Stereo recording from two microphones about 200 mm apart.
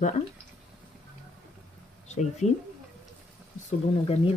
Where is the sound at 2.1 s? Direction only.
35° left (ahead or behind).